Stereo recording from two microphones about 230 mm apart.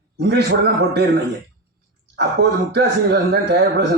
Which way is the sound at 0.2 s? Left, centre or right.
Right.